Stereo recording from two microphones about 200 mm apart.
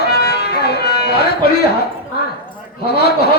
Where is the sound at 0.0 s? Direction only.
55° left (ahead or behind).